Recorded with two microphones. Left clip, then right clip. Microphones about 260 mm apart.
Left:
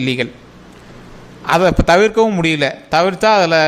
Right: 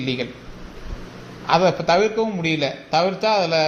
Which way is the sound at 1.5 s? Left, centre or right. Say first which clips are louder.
Left 5 dB; left.